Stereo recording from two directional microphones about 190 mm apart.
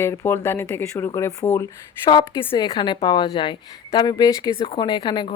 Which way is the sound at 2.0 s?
25° left (ahead or behind).